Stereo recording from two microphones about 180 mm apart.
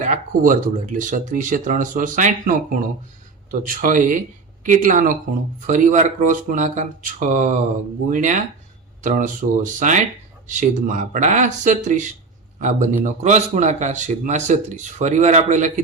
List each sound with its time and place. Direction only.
0.0 s a man's voice: 45° right (ahead or behind)